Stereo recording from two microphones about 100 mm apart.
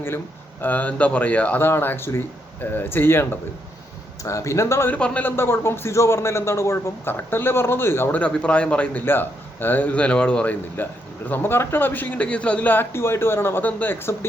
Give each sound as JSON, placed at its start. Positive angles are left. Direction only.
{"t": 0.6, "sound": "a man's voice", "side_deg": 15}
{"t": 4.9, "sound": "a man's voice", "side_deg": 10}
{"t": 5.4, "sound": "a man's voice", "side_deg": 25}
{"t": 8.2, "sound": "a man's voice", "side_deg": 10}